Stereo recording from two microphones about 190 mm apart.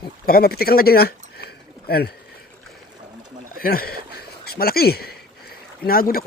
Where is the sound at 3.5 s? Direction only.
50° left (ahead or behind).